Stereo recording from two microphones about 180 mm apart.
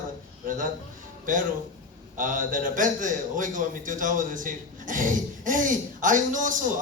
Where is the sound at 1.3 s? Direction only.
45° right (ahead or behind).